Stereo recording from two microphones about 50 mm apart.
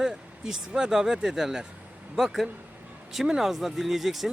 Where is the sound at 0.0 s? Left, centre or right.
Centre.